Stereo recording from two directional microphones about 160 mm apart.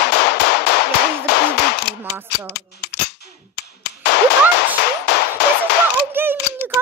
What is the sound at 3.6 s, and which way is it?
Clapping, 90° left.